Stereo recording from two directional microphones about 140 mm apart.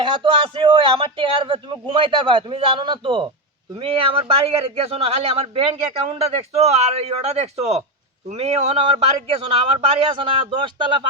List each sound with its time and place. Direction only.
0.0 s a man's voice: 40° right (ahead or behind)